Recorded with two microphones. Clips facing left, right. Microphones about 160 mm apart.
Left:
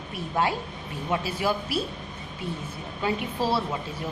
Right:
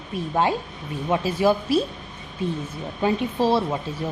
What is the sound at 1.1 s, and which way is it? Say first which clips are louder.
Speech: right 4 dB; 25° right (ahead or behind).